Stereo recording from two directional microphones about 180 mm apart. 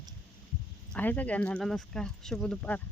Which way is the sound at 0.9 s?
10° left (ahead or behind).